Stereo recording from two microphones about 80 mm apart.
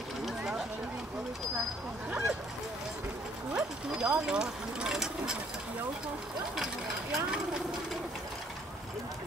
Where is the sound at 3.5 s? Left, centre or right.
Centre.